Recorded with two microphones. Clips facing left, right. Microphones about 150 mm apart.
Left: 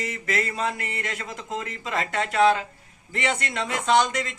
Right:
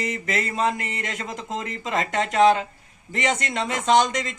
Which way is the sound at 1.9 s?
20° right (ahead or behind).